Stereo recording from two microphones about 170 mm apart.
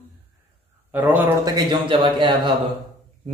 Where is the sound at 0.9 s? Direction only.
10° right (ahead or behind).